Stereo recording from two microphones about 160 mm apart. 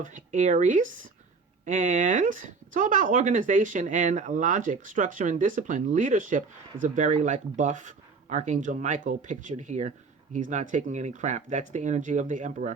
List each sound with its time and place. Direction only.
0.0 s speech: 55° right (ahead or behind)